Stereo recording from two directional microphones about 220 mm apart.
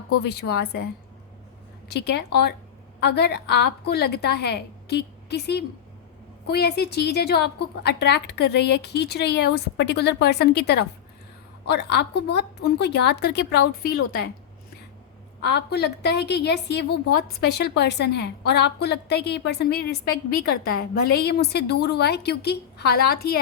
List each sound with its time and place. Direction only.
0.2 s a woman's voice: 50° left (ahead or behind)
1.9 s a woman's voice: 50° left (ahead or behind)
15.4 s a woman's voice: 50° left (ahead or behind)